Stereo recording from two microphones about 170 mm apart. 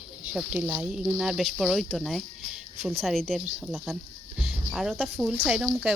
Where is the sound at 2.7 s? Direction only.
40° right (ahead or behind).